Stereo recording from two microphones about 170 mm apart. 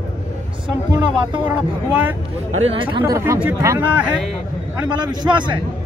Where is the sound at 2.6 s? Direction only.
30° right (ahead or behind).